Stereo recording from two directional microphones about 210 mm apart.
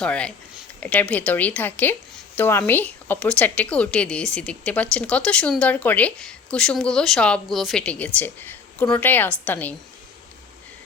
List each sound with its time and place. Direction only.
0.0 s a woman's voice: 5° left (ahead or behind)